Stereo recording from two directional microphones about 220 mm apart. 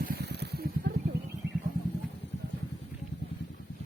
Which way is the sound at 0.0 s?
45° right (ahead or behind).